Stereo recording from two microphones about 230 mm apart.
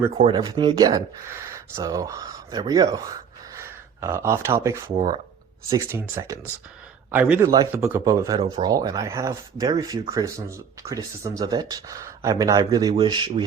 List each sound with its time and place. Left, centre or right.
0.2 s speech: right